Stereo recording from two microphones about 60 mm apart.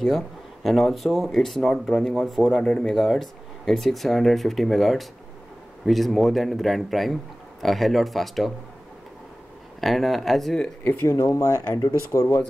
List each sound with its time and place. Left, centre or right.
0.7 s speech: centre
9.8 s speech: centre
11.1 s speech: left